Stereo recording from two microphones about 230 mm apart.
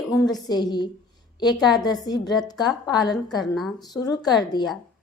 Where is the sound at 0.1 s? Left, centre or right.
Centre.